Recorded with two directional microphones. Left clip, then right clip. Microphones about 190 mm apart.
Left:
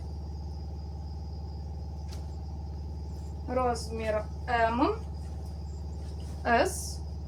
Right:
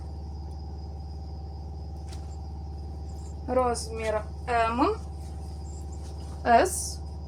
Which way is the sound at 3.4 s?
55° right (ahead or behind).